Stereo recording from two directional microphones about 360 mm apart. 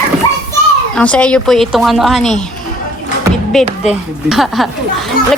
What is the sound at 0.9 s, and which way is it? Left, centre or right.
Speech, centre.